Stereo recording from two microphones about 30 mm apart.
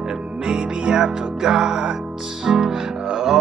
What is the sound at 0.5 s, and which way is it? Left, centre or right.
Music, right.